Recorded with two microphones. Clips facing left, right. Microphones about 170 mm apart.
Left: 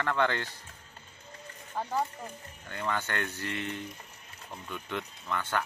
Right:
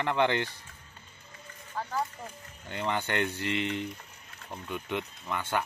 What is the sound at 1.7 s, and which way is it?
Speech, 15° left (ahead or behind).